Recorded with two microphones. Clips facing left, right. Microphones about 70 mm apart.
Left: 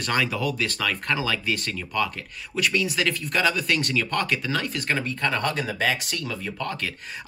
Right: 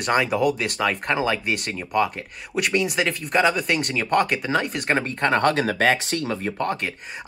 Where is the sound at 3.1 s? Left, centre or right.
Right.